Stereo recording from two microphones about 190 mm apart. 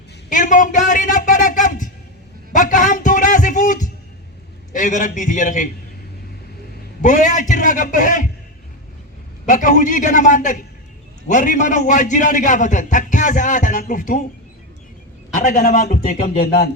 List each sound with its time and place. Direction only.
0.3 s a sound: 45° left (ahead or behind)
4.7 s a man's voice: 40° left (ahead or behind)
7.0 s a man's voice: 40° left (ahead or behind)
9.5 s a man's voice: 45° left (ahead or behind)
15.4 s a man's voice: 40° left (ahead or behind)